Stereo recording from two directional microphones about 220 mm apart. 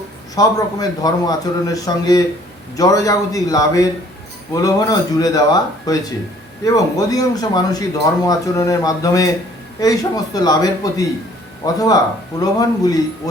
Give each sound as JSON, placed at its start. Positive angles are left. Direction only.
{"t": 0.3, "sound": "a man's voice", "side_deg": 15}